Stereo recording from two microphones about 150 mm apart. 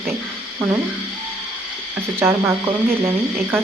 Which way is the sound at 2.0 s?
15° right (ahead or behind).